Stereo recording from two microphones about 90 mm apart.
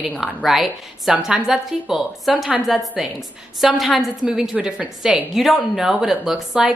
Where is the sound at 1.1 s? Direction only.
15° right (ahead or behind).